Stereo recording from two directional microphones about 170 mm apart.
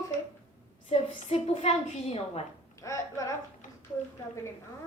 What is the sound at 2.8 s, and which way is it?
Speech, 20° left (ahead or behind).